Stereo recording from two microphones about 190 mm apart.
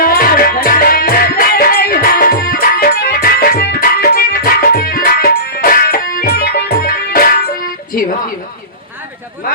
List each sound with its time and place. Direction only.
0.0 s music: 50° left (ahead or behind)